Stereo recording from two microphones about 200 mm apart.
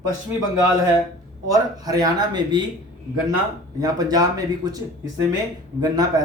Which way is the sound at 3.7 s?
20° right (ahead or behind).